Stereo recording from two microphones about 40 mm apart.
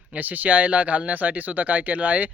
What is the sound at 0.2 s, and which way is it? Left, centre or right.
Speech, right.